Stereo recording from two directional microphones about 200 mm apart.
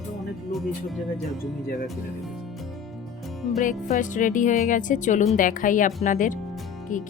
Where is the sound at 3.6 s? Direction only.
40° left (ahead or behind).